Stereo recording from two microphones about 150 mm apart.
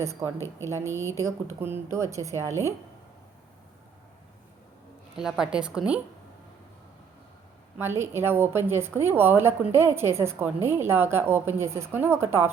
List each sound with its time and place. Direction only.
0.0 s a woman's voice: 20° right (ahead or behind)
5.1 s speech: 5° right (ahead or behind)
7.8 s a woman's voice: 15° right (ahead or behind)